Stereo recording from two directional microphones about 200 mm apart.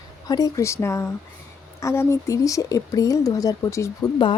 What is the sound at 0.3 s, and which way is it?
Speech, 20° left (ahead or behind).